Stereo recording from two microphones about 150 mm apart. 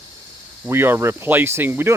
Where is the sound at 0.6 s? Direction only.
15° right (ahead or behind).